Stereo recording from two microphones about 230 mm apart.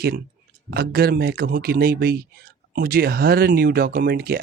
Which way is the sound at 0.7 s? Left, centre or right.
Right.